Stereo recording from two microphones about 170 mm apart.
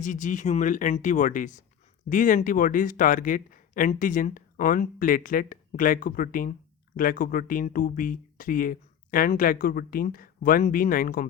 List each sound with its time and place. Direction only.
0.0 s speech: 45° left (ahead or behind)